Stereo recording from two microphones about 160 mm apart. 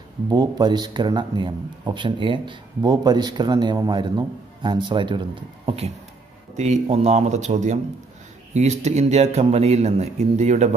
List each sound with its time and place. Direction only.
0.3 s a man's voice: 25° right (ahead or behind); by 10.7 s 45° right (ahead or behind)